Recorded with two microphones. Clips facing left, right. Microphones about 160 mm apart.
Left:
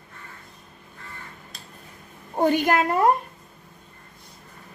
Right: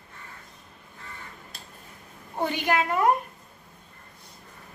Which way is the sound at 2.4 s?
45° left (ahead or behind).